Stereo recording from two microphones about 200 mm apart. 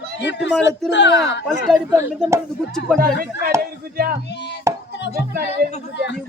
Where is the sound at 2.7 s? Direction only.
Centre (ahead or behind).